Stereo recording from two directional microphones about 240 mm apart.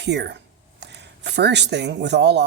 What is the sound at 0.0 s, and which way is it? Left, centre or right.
Speech, right.